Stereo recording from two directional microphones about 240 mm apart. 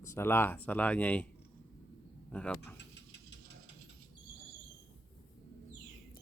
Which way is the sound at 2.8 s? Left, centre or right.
Left.